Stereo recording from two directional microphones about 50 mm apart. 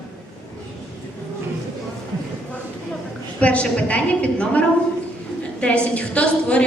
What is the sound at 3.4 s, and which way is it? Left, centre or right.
A woman's voice, left.